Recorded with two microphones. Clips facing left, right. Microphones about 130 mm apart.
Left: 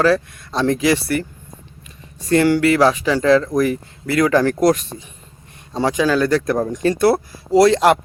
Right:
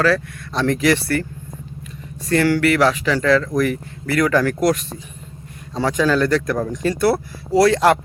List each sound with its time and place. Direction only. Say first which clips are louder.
0.0 s speech: left 2 dB; 20° left (ahead or behind)
2.3 s speech: left 2 dB; 20° left (ahead or behind)
5.7 s speech: left 1 dB; 15° left (ahead or behind)